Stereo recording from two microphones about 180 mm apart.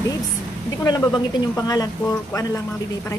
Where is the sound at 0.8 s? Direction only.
20° left (ahead or behind).